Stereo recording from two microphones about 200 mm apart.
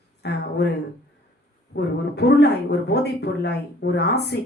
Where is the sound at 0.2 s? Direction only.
55° left (ahead or behind).